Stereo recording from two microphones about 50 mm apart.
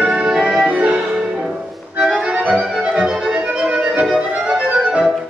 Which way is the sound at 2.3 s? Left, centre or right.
Right.